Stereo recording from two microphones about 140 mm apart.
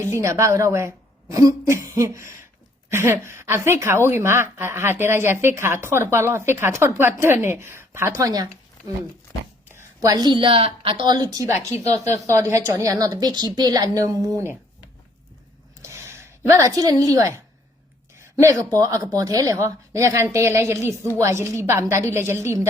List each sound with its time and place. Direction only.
0.0 s a woman's voice: 20° right (ahead or behind)
9.7 s a woman's voice: 25° right (ahead or behind)
15.8 s a sound: 20° right (ahead or behind)
18.2 s a woman's voice: 20° right (ahead or behind)